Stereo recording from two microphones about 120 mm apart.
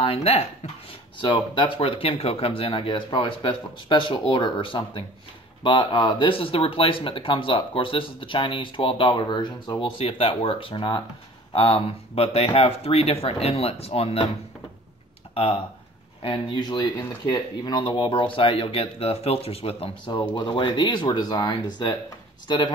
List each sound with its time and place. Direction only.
0.0 s speech: 55° left (ahead or behind)
1.2 s speech: 40° left (ahead or behind); by 14.3 s 55° left (ahead or behind)
15.3 s speech: 55° left (ahead or behind)
20.3 s speech: 40° left (ahead or behind)